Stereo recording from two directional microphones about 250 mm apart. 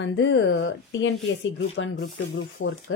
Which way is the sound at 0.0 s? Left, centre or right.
Left.